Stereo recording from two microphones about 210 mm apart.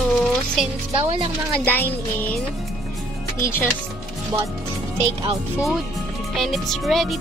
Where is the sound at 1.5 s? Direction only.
10° left (ahead or behind).